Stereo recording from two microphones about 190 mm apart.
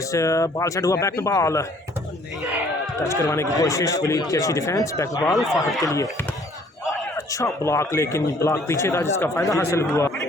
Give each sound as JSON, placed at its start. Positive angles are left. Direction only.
{"t": 0.1, "sound": "a man's voice", "side_deg": 15}
{"t": 3.2, "sound": "a man's voice", "side_deg": 15}
{"t": 5.4, "sound": "speech", "side_deg": 0}
{"t": 5.8, "sound": "a man's voice", "side_deg": 20}
{"t": 7.3, "sound": "a man's voice", "side_deg": 15}